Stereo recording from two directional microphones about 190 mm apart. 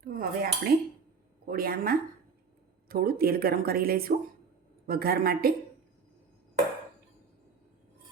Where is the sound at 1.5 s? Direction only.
50° right (ahead or behind).